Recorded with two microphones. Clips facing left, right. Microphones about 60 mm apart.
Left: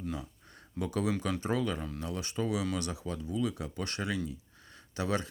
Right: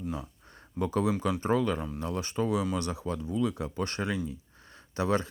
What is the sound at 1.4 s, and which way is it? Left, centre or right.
Speech, right.